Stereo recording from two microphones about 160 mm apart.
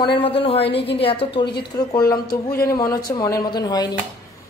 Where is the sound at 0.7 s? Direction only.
90° left.